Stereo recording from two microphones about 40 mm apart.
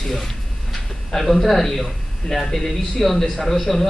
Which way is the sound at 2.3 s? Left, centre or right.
Centre.